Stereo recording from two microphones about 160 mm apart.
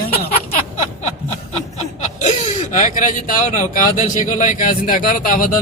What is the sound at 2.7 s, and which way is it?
Speech, 50° left (ahead or behind).